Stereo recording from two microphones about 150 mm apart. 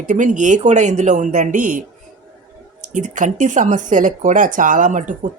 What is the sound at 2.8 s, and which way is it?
Speech, 55° right (ahead or behind).